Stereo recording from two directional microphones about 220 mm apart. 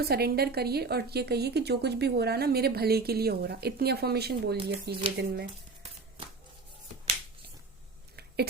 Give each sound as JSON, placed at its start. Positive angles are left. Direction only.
{"t": 0.0, "sound": "a woman's voice", "side_deg": -45}